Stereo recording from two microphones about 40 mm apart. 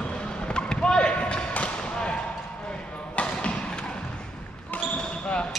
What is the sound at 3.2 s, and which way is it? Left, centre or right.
Basketball bounce, left.